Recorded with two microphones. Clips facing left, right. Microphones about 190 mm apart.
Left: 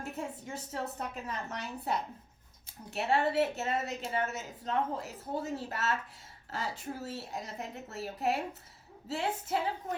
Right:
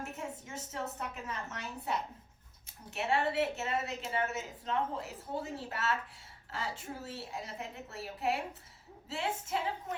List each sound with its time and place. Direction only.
0.0 s a woman's voice: 35° left (ahead or behind)